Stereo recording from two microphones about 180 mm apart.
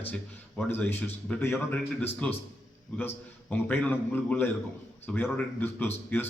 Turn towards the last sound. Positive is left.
turn(degrees=10)  # may be behind; listen again after turning